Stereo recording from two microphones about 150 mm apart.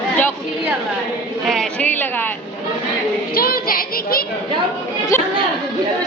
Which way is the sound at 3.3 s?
85° left.